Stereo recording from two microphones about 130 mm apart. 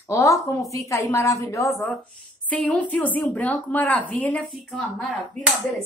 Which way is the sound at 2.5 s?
10° left (ahead or behind).